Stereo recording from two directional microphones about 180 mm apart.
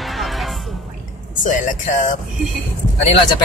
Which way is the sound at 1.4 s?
45° left (ahead or behind).